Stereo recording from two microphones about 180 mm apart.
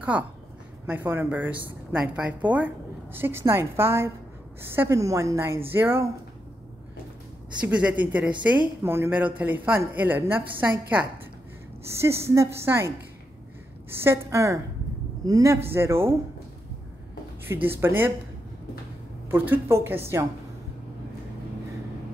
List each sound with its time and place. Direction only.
0.1 s speech: 10° right (ahead or behind)
7.6 s speech: 10° right (ahead or behind)
17.5 s speech: 10° right (ahead or behind)
19.3 s speech: 10° right (ahead or behind)